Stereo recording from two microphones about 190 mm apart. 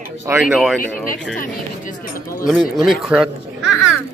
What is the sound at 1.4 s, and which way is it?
Speech, 45° left (ahead or behind).